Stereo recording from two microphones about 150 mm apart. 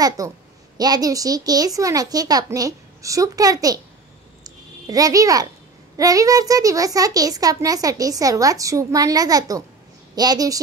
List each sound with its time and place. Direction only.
0.2 s a child's voice: 25° right (ahead or behind)
4.8 s a child's voice: 25° right (ahead or behind)